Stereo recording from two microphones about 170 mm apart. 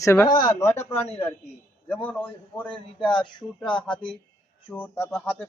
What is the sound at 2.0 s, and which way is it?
Speech, 10° left (ahead or behind).